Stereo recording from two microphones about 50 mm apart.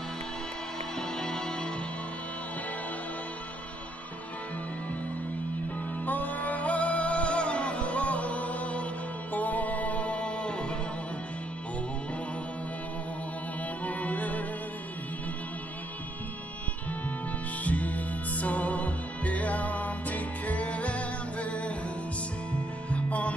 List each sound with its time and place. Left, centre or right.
0.9 s music: centre
6.0 s music: left; by 10.8 s centre
13.8 s music: left
17.6 s music: left
22.8 s music: left